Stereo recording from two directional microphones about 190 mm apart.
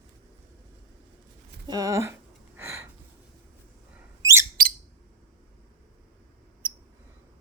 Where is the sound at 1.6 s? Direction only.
20° right (ahead or behind).